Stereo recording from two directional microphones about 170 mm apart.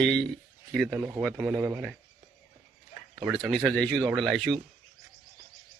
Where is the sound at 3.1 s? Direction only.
Centre (ahead or behind).